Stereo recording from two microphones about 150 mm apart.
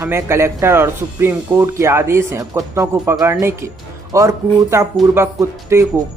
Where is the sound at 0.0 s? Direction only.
15° right (ahead or behind).